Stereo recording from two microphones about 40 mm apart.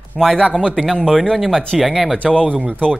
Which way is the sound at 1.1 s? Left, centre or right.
Centre.